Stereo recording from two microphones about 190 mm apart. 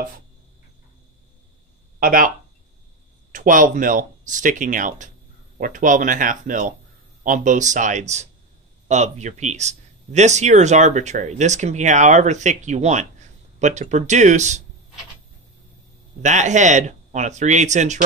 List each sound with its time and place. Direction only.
2.0 s speech: 45° right (ahead or behind)
16.2 s speech: 40° right (ahead or behind)